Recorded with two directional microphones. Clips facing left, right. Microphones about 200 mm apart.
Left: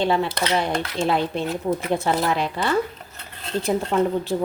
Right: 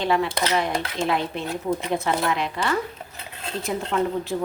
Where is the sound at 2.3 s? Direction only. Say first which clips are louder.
Left 2 dB; 35° left (ahead or behind).